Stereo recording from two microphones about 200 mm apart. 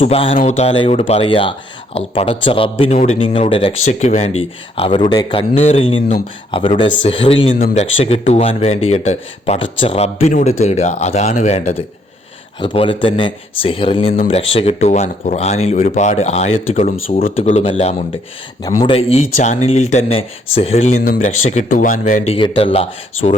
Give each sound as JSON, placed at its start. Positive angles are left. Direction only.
{"t": 0.0, "sound": "speech", "side_deg": 30}
{"t": 17.3, "sound": "speech", "side_deg": 35}
{"t": 22.3, "sound": "speech", "side_deg": 25}